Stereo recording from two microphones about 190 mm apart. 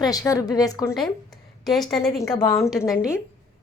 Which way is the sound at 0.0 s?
20° left (ahead or behind).